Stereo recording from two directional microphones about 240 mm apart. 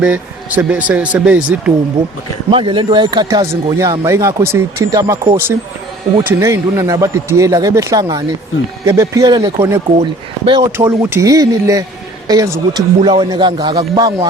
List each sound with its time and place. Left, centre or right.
0.0 s a man's voice: centre
2.5 s speech: right